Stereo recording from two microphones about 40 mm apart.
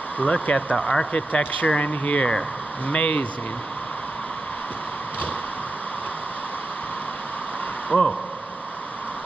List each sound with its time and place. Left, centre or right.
0.2 s speech: left
7.9 s speech: left